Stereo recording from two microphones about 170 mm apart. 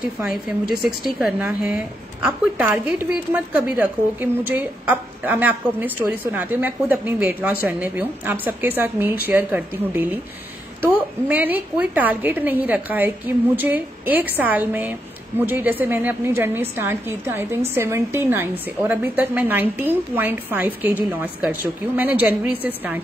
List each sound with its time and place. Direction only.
0.2 s a woman's voice: 5° right (ahead or behind)